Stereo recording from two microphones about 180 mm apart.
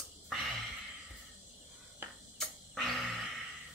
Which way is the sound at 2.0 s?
10° right (ahead or behind).